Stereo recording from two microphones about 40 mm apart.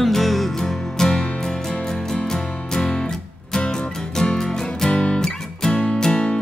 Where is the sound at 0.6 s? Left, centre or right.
Centre.